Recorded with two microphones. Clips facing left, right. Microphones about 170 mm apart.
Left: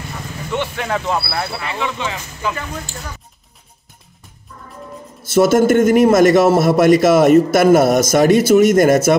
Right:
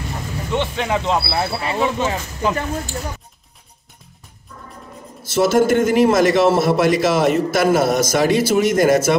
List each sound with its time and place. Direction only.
0.5 s speech: 20° right (ahead or behind); by 2.1 s 40° right (ahead or behind)
5.3 s a man's voice: 50° left (ahead or behind)